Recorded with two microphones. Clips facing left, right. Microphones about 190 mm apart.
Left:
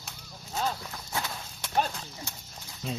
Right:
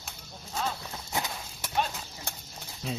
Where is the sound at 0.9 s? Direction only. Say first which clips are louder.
Right 1 dB; 20° right (ahead or behind).